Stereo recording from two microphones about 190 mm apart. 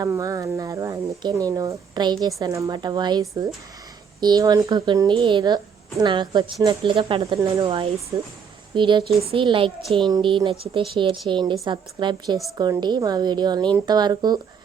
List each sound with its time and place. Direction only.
0.0 s a woman's voice: 15° right (ahead or behind)